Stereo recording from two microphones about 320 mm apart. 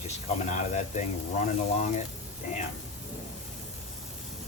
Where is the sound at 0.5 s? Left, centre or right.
Left.